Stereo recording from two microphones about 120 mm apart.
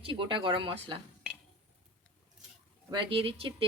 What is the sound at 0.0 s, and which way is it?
Speech, 45° right (ahead or behind).